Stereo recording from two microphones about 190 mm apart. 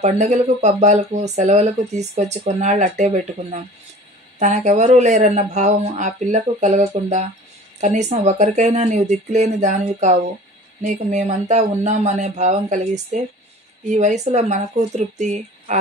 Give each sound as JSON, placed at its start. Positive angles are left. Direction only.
{"t": 0.0, "sound": "speech", "side_deg": -35}